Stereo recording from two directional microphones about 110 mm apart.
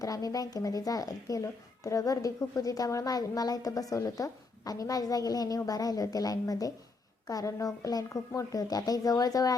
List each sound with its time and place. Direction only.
0.0 s speech: 35° left (ahead or behind)